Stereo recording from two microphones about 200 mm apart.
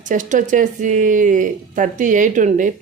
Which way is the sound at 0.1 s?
40° right (ahead or behind).